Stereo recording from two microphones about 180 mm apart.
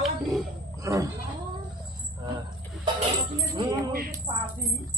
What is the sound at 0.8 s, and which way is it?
Speech, 20° right (ahead or behind).